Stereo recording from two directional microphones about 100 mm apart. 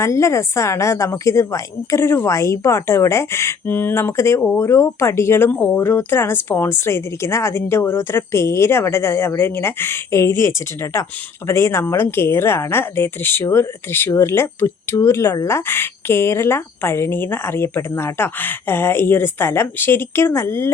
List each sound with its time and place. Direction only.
0.0 s a woman's voice: 30° left (ahead or behind)